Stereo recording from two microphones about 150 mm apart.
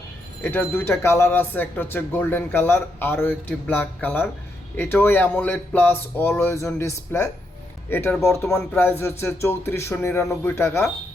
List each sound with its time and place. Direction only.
0.4 s speech: 15° left (ahead or behind)